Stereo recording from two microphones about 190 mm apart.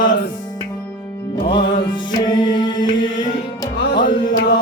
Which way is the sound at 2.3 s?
25° left (ahead or behind).